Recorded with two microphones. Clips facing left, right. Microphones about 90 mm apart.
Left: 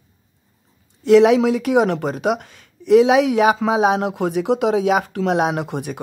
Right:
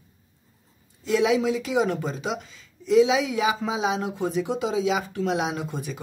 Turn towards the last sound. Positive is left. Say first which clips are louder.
# left 7 dB
turn(degrees=65)  # may be behind; listen again after turning